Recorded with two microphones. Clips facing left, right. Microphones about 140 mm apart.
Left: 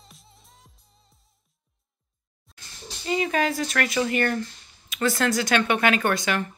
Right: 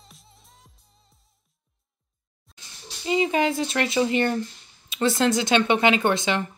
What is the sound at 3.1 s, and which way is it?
Speech, 20° right (ahead or behind).